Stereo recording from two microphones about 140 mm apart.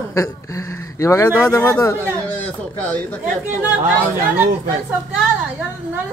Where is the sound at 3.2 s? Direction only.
10° right (ahead or behind).